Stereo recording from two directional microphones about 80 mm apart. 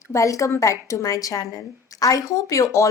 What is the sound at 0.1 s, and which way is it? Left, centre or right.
A woman's voice, left.